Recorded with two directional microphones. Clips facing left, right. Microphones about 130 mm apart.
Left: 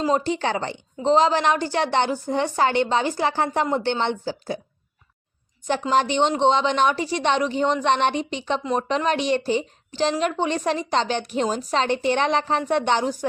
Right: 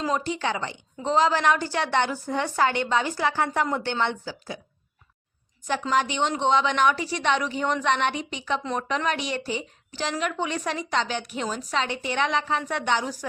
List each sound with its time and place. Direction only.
0.0 s speech: 30° left (ahead or behind)
1.1 s a woman's voice: 20° left (ahead or behind)
5.9 s a woman's voice: 30° left (ahead or behind)